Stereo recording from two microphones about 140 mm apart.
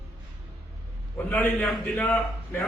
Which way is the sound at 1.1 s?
10° left (ahead or behind).